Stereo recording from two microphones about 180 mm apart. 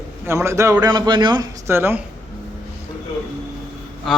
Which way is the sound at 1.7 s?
15° right (ahead or behind).